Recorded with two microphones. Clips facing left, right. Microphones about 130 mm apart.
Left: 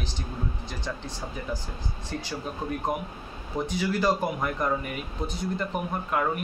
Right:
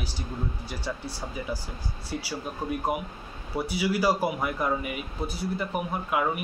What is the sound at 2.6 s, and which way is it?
Speech, 10° right (ahead or behind).